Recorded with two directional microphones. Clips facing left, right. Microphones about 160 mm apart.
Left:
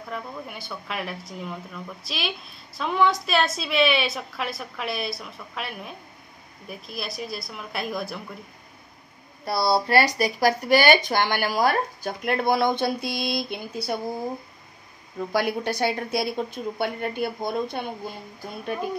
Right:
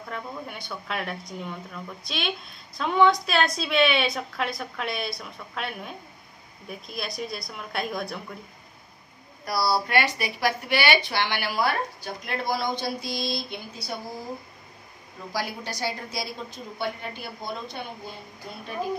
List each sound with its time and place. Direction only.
0.1 s a woman's voice: centre (ahead or behind)
9.4 s speech: 25° left (ahead or behind)
9.9 s speech: 40° left (ahead or behind); by 13.9 s 55° left (ahead or behind)
15.3 s a woman's voice: 60° left (ahead or behind)